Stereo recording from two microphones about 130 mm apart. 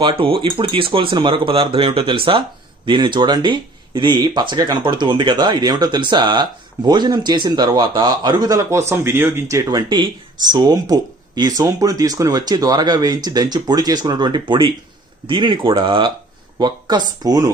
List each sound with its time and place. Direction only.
0.0 s speech: 45° right (ahead or behind)